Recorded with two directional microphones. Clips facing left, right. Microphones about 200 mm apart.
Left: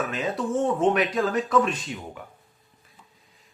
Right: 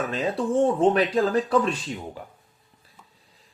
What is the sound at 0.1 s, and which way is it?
Speech, 30° right (ahead or behind).